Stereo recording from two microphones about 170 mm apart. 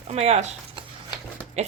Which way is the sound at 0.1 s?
40° right (ahead or behind).